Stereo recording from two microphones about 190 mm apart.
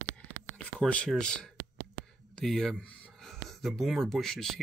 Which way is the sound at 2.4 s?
Centre (ahead or behind).